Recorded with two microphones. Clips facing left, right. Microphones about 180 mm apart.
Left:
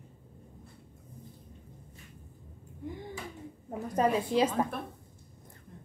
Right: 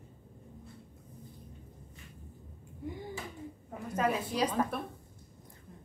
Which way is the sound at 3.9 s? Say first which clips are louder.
Left 5 dB; 30° left (ahead or behind).